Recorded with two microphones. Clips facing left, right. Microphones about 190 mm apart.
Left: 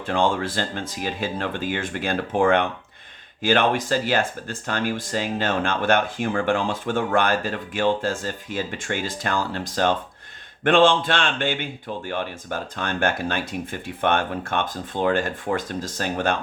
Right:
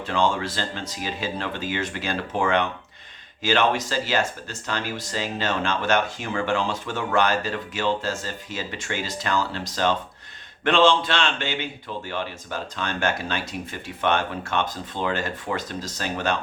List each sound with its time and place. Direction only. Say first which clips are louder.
0.0 s speech: left 1 dB; 55° left (ahead or behind)